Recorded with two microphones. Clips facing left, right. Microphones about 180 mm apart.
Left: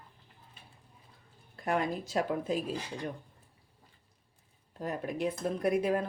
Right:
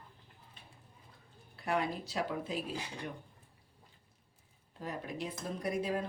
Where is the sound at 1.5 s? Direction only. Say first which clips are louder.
Left 3 dB; 45° left (ahead or behind).